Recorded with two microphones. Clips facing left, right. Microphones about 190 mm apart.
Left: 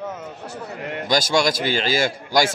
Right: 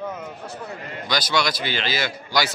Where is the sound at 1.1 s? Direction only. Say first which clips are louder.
Left 4 dB; 45° left (ahead or behind).